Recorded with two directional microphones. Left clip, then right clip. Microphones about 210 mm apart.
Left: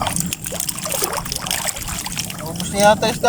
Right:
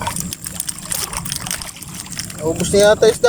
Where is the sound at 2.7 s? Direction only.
30° right (ahead or behind).